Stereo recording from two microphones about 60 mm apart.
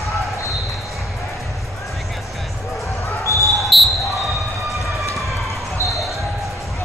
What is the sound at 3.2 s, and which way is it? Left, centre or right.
Basketball bounce, left.